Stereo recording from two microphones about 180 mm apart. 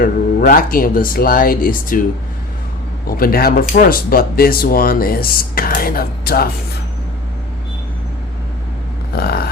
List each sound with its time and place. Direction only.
0.0 s speech: 50° left (ahead or behind)
3.1 s speech: 55° left (ahead or behind)
9.1 s vehicle: 60° left (ahead or behind)